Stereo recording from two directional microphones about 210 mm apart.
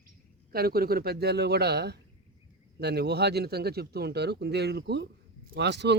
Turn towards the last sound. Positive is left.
turn(degrees=-55)  # may be behind; listen again after turning